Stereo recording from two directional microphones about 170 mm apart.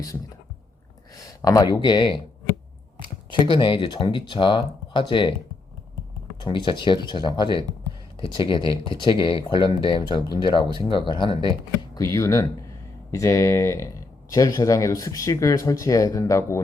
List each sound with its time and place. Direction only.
1.1 s speech: 20° left (ahead or behind)
3.4 s speech: 30° left (ahead or behind)
6.4 s speech: 25° left (ahead or behind)
11.9 s speech: 20° left (ahead or behind)